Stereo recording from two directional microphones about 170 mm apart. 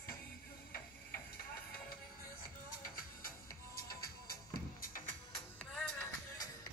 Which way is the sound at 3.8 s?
60° left (ahead or behind).